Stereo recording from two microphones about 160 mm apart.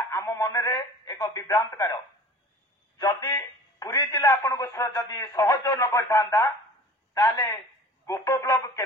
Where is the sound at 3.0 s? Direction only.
20° left (ahead or behind).